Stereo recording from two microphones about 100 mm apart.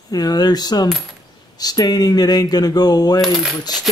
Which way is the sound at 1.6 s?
40° left (ahead or behind).